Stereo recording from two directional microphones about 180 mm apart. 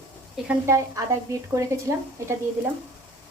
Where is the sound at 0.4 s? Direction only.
15° right (ahead or behind).